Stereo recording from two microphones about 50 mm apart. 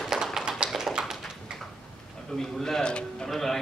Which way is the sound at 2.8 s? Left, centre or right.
Centre.